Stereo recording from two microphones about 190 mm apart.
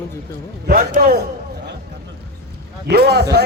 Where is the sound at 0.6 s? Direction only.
50° right (ahead or behind).